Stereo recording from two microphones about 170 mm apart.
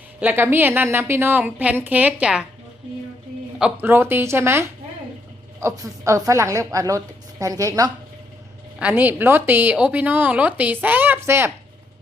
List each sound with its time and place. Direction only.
0.2 s a woman's voice: 10° right (ahead or behind)
3.6 s a woman's voice: 15° right (ahead or behind)
8.8 s a woman's voice: 10° right (ahead or behind)